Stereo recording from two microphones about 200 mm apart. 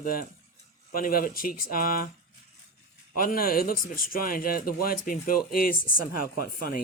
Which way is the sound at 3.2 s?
45° left (ahead or behind).